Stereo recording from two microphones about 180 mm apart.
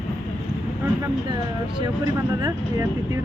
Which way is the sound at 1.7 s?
20° right (ahead or behind).